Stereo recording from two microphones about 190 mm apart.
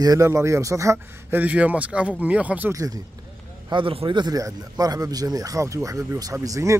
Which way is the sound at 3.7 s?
25° right (ahead or behind).